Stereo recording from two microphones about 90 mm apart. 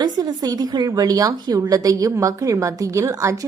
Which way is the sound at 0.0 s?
45° right (ahead or behind).